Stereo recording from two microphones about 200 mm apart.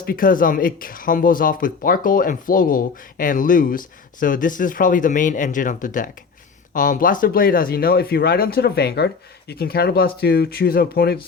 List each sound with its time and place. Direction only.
0.0 s speech: 45° left (ahead or behind)